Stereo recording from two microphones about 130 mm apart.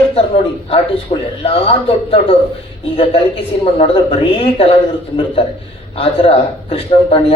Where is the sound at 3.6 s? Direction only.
45° left (ahead or behind).